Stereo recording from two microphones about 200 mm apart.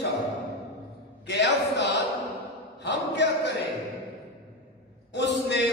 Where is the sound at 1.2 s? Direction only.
60° left (ahead or behind).